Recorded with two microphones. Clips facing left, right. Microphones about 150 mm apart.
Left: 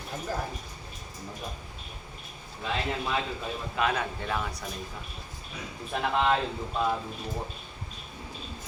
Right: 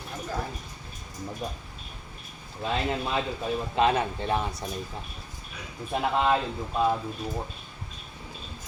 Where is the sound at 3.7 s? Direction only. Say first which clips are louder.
Right 5 dB; 25° right (ahead or behind).